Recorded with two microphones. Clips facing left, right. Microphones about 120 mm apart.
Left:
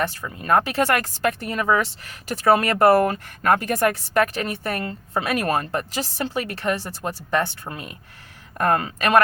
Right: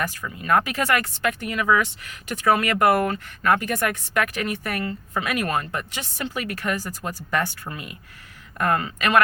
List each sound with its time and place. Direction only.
0.0 s speech: 30° left (ahead or behind)
7.7 s speech: 40° left (ahead or behind)